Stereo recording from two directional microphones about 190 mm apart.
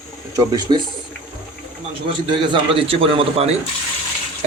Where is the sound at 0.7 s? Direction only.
25° right (ahead or behind).